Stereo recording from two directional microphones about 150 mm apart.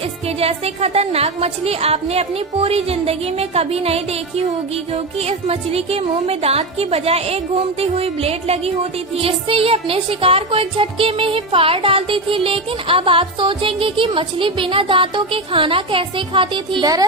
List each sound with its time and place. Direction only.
0.3 s a woman's voice: 40° right (ahead or behind)
7.8 s music: 40° right (ahead or behind); by 17.1 s 25° right (ahead or behind)